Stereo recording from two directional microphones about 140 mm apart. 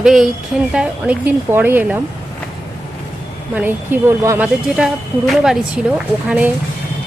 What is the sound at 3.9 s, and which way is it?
Speech, 15° right (ahead or behind).